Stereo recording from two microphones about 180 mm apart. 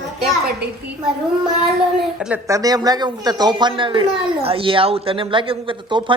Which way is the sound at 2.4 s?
20° right (ahead or behind).